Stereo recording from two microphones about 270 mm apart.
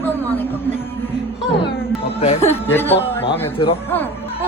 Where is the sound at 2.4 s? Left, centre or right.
Centre.